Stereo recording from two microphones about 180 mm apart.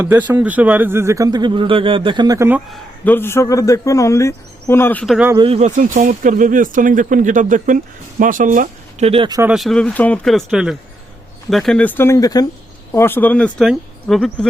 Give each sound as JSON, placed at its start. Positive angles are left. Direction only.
{"t": 0.0, "sound": "speech", "side_deg": -10}
{"t": 3.0, "sound": "speech", "side_deg": 10}
{"t": 5.1, "sound": "speech", "side_deg": -10}
{"t": 5.4, "sound": "speech", "side_deg": -35}
{"t": 9.4, "sound": "speech", "side_deg": -5}